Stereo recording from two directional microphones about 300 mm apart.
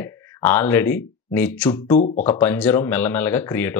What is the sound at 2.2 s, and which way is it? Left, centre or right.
Speech, centre.